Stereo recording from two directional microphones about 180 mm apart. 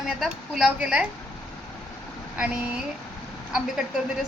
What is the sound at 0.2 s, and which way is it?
Speech, centre (ahead or behind).